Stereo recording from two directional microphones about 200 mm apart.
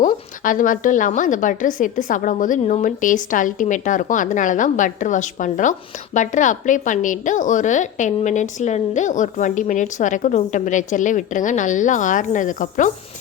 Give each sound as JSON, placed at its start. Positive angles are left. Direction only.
{"t": 0.0, "sound": "a woman's voice", "side_deg": 40}